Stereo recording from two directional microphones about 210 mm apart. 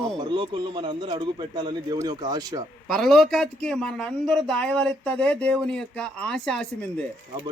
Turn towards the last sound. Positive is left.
turn(degrees=5)  # may be behind; listen again after turning